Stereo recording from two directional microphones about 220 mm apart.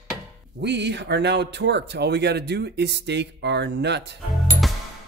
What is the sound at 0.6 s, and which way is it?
Speech, 50° right (ahead or behind).